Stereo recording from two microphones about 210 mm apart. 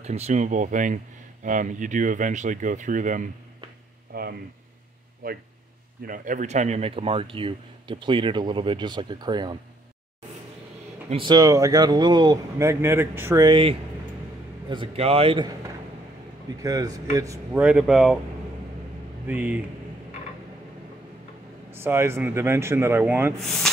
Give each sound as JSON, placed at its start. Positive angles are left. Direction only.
{"t": 0.0, "sound": "speech", "side_deg": -35}
{"t": 11.1, "sound": "speech", "side_deg": -25}
{"t": 16.6, "sound": "speech", "side_deg": -15}
{"t": 19.2, "sound": "speech", "side_deg": -10}
{"t": 21.7, "sound": "speech", "side_deg": -10}
{"t": 23.4, "sound": "speech", "side_deg": 0}